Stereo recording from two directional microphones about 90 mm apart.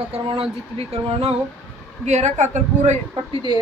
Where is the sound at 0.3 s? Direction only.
90° right.